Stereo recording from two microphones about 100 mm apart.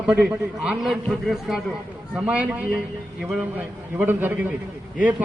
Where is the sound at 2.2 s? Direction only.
10° right (ahead or behind).